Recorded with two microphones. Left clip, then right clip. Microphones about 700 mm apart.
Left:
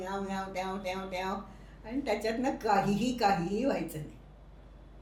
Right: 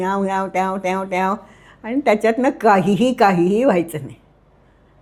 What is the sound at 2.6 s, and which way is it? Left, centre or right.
Speech, right.